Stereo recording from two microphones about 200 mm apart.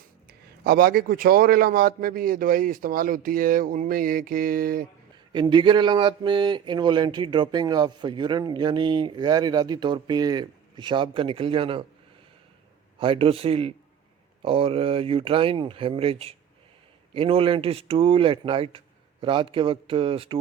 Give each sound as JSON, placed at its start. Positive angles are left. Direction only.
{"t": 0.3, "sound": "a man's voice", "side_deg": -50}
{"t": 5.3, "sound": "speech", "side_deg": -25}
{"t": 13.0, "sound": "speech", "side_deg": -30}